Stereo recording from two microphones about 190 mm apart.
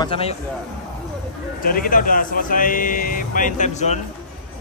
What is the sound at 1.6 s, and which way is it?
Speech, 45° left (ahead or behind).